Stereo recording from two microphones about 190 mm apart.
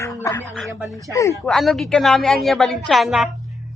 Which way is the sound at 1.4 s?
Centre (ahead or behind).